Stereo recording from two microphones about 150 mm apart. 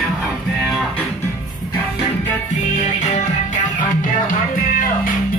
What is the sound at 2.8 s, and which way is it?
Music, 55° left (ahead or behind).